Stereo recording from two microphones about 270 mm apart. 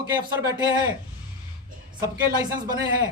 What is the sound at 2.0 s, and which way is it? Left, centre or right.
Speech, centre.